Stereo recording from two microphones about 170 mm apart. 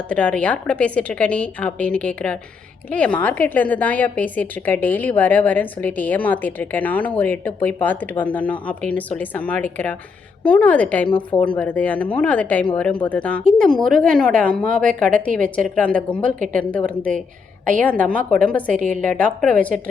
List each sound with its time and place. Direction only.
0.1 s a woman's voice: 5° left (ahead or behind)
18.7 s a woman's voice: 50° right (ahead or behind)
19.2 s a woman's voice: 5° left (ahead or behind)